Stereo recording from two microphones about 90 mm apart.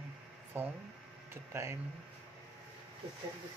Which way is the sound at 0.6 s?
25° right (ahead or behind).